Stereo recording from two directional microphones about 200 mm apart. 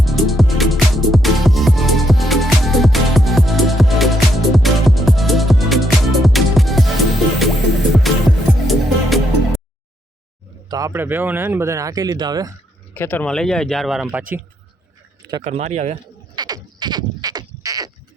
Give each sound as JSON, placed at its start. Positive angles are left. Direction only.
{"t": 0.0, "sound": "music", "side_deg": 0}
{"t": 10.7, "sound": "speech", "side_deg": -15}
{"t": 12.9, "sound": "speech", "side_deg": 10}
{"t": 15.4, "sound": "speech", "side_deg": -35}
{"t": 16.3, "sound": "goat", "side_deg": -20}